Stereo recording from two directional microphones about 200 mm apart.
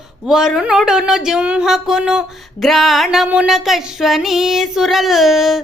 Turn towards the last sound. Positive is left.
turn(degrees=0)  # may be behind; listen again after turning